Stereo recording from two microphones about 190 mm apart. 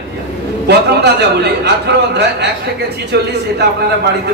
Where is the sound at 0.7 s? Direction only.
60° right (ahead or behind).